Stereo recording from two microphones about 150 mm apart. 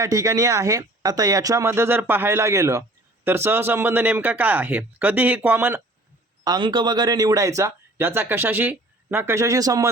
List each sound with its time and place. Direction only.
0.0 s speech: 20° right (ahead or behind)
6.4 s speech: 25° right (ahead or behind)